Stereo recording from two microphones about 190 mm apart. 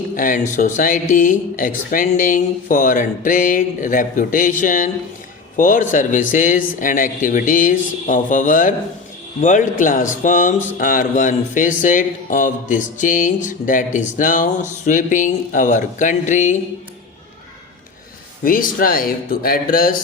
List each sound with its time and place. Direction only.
0.2 s speech: 40° left (ahead or behind)
18.4 s speech: 45° left (ahead or behind)